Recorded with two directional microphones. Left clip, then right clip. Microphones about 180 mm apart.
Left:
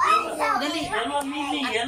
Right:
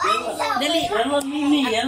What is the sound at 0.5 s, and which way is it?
Speech, 15° right (ahead or behind).